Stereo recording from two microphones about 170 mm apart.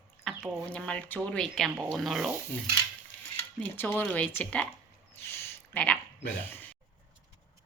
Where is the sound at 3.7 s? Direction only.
10° left (ahead or behind).